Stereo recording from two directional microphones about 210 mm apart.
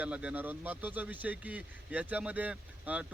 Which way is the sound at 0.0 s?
5° right (ahead or behind).